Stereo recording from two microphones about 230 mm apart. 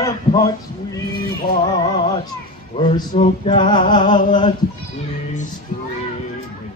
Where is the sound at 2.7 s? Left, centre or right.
Left.